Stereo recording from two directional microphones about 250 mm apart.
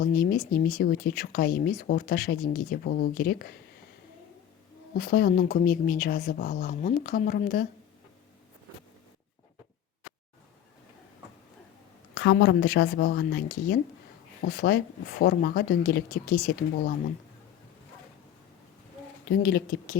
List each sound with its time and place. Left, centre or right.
0.0 s speech: left
4.9 s speech: left
12.1 s speech: left
19.3 s speech: left